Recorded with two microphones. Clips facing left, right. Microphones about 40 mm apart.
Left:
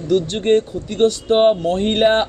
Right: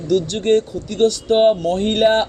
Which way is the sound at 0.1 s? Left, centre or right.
Left.